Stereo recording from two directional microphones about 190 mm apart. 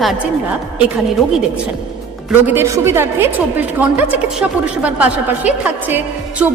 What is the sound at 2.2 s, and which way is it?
A woman's voice, 10° right (ahead or behind).